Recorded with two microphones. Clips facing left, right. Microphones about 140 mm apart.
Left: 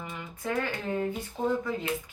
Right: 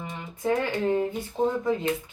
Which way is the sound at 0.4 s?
25° right (ahead or behind).